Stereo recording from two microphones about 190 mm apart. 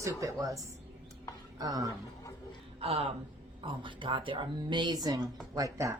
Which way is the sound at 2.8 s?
30° right (ahead or behind).